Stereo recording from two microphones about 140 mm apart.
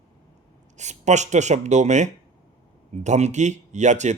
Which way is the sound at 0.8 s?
55° right (ahead or behind).